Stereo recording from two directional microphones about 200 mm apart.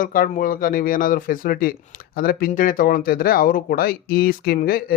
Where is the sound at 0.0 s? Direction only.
45° left (ahead or behind).